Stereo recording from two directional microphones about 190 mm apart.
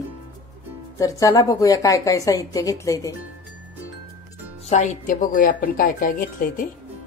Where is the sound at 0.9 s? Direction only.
15° left (ahead or behind).